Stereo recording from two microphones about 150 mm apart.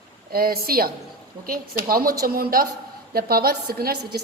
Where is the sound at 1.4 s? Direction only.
75° right (ahead or behind).